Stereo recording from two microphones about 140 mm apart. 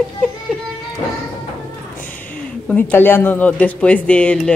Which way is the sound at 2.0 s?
10° left (ahead or behind).